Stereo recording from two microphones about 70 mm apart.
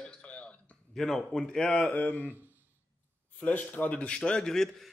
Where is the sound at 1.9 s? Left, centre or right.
Left.